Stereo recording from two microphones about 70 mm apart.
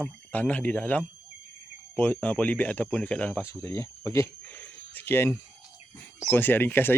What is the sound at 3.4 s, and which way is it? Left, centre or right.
Speech, left.